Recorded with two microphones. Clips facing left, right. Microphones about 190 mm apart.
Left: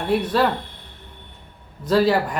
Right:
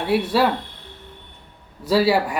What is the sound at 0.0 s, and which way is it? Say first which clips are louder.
Speech: right 1 dB; 10° right (ahead or behind).